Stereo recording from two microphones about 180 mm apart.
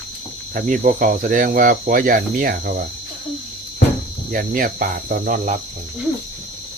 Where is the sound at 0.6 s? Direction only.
50° right (ahead or behind).